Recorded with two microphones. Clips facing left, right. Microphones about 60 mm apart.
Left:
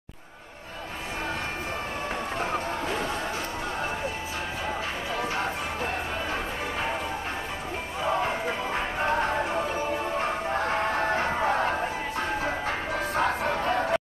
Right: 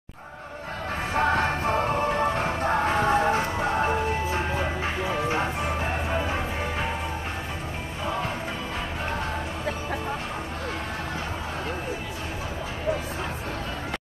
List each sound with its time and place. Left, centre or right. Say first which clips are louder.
1.1 s music: right 10 dB; right
2.3 s music: right 4 dB; right
11.1 s chatter: left 7 dB; left